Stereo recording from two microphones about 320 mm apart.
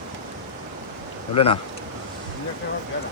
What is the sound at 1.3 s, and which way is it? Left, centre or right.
Speech, centre.